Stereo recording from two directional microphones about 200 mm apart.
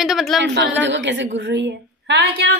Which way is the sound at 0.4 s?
60° right (ahead or behind).